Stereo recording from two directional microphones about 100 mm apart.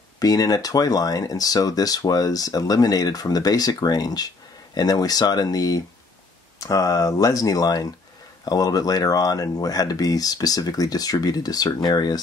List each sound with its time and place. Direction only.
0.2 s speech: 40° left (ahead or behind)